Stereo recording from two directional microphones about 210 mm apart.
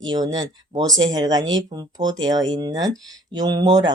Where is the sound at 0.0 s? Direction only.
20° right (ahead or behind).